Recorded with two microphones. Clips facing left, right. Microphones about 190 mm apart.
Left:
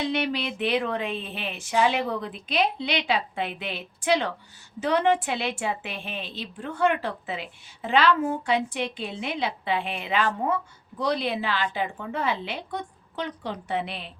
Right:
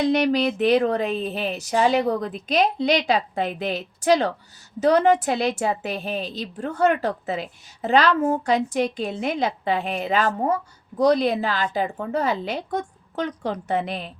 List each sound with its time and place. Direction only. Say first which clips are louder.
0.0 s a woman's voice: right 7 dB; 40° right (ahead or behind)